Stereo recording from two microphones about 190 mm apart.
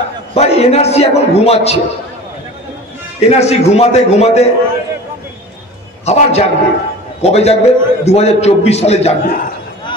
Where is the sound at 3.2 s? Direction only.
35° left (ahead or behind).